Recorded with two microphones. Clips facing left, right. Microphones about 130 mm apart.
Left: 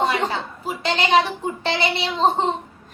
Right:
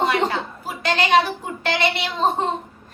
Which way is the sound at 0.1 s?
25° left (ahead or behind).